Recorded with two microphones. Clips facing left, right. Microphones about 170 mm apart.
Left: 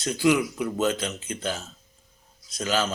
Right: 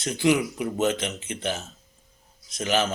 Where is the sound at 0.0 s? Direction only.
20° right (ahead or behind).